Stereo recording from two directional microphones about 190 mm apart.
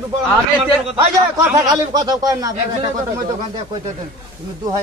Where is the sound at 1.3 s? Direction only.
20° right (ahead or behind).